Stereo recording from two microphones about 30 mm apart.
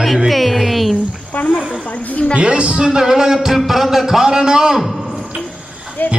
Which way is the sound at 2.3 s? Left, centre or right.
Right.